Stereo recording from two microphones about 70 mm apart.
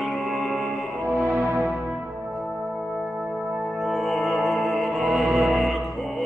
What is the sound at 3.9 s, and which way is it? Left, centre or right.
Music, centre.